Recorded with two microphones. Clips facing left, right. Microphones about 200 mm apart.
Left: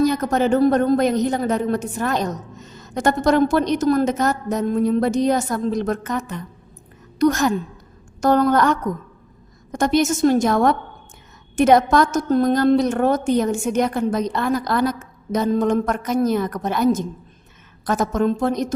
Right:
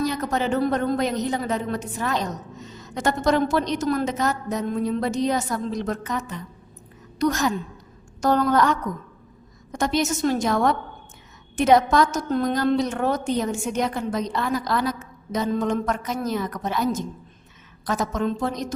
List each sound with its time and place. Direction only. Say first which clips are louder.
0.0 s a woman's voice: left 6 dB; 45° left (ahead or behind)